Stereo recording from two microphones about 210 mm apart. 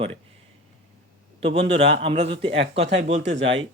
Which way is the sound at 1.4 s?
30° right (ahead or behind).